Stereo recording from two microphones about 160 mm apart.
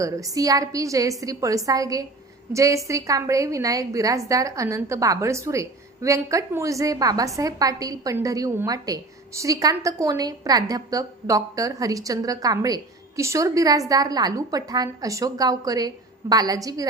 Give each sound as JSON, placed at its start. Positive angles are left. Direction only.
{"t": 0.0, "sound": "a woman's voice", "side_deg": -20}